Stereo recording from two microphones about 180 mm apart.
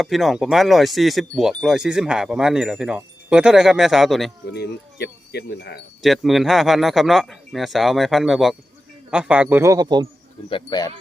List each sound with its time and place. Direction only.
0.0 s speech: centre (ahead or behind)
4.4 s speech: 65° left (ahead or behind)
6.0 s speech: centre (ahead or behind); by 10.1 s 20° right (ahead or behind)
10.5 s speech: 25° left (ahead or behind)